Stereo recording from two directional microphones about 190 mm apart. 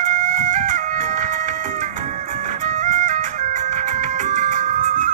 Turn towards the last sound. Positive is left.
turn(degrees=-40)  # may be behind; listen again after turning